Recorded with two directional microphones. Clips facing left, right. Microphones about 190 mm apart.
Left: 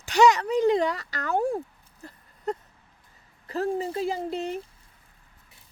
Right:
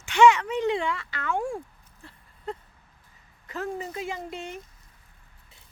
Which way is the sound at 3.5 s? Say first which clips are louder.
Left 5 dB; 35° left (ahead or behind).